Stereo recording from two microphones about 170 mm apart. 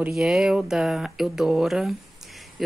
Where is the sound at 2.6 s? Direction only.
Centre (ahead or behind).